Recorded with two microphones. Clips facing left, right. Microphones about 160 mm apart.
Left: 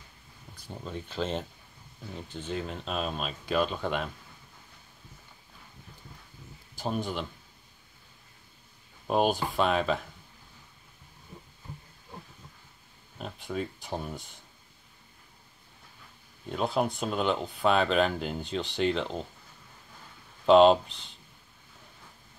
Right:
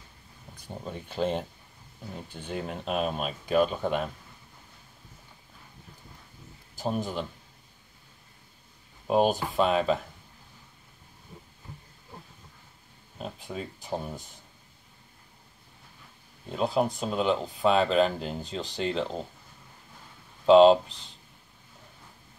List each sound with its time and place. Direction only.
0.6 s speech: 15° right (ahead or behind)
3.2 s speech: 50° right (ahead or behind)
3.5 s speech: 10° right (ahead or behind)
6.8 s speech: centre (ahead or behind)
9.0 s speech: centre (ahead or behind)
13.2 s speech: centre (ahead or behind)
16.4 s speech: centre (ahead or behind)
20.4 s speech: centre (ahead or behind)